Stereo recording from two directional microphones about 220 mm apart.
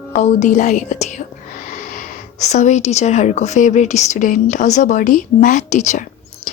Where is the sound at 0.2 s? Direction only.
30° left (ahead or behind).